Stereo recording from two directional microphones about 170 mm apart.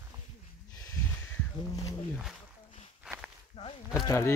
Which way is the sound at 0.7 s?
20° left (ahead or behind).